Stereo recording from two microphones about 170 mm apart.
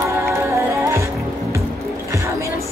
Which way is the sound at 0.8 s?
15° right (ahead or behind).